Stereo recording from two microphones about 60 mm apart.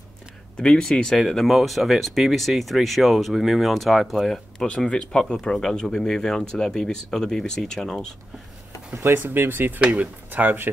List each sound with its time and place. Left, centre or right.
0.6 s speech: centre
9.0 s speech: right
9.8 s speech: right